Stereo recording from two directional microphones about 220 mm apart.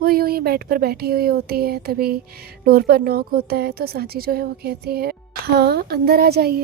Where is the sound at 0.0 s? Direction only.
45° right (ahead or behind).